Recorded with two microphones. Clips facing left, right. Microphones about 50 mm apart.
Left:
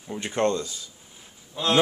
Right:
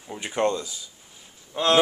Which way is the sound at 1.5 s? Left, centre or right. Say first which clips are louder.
Right 4 dB; right.